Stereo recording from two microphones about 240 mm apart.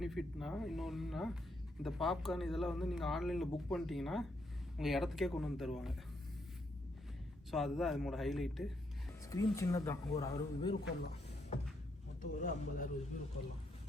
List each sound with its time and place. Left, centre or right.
0.0 s speech: centre
7.5 s speech: centre
9.3 s speech: centre
12.2 s speech: left